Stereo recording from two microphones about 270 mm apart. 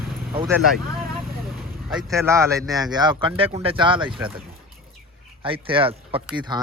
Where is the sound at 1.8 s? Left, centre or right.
Centre.